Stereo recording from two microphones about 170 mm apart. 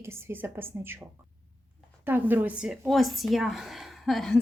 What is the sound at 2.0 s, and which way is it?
Speech, 10° right (ahead or behind).